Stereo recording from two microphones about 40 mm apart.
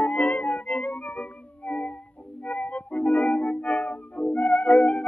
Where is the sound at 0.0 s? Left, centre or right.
Left.